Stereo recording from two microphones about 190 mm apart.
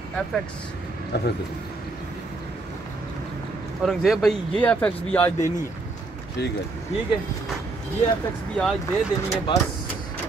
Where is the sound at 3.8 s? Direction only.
Centre (ahead or behind).